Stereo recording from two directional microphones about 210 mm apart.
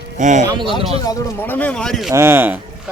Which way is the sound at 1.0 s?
10° left (ahead or behind).